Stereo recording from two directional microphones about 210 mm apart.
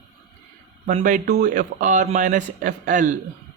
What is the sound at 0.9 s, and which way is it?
Speech, 35° right (ahead or behind).